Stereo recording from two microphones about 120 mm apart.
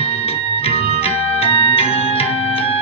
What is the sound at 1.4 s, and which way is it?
Organ, 55° left (ahead or behind).